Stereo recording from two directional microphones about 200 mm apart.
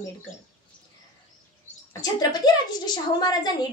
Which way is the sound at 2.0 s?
20° left (ahead or behind).